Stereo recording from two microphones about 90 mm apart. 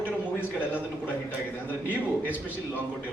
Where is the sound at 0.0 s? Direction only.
20° left (ahead or behind).